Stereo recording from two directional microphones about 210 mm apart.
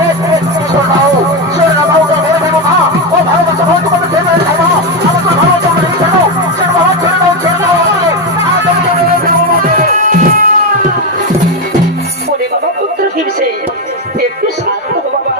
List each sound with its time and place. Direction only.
9.7 s music: 40° right (ahead or behind)